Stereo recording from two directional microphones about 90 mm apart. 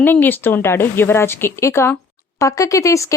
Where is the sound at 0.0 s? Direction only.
20° left (ahead or behind).